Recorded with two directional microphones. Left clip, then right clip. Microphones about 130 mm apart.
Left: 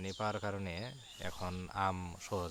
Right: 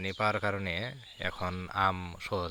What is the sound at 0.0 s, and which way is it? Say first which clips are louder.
Speech: right 8 dB; 20° right (ahead or behind).